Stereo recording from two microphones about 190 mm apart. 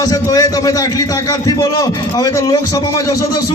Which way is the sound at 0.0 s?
20° left (ahead or behind).